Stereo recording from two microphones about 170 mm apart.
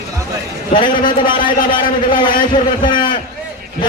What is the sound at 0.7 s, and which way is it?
Speech, 30° left (ahead or behind).